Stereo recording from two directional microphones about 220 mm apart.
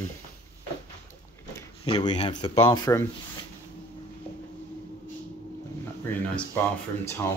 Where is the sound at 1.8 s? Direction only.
20° left (ahead or behind).